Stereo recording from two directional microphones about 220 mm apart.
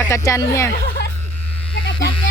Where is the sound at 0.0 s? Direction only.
15° left (ahead or behind).